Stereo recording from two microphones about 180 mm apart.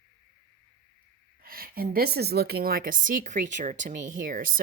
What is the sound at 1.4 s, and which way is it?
Speech, 55° right (ahead or behind).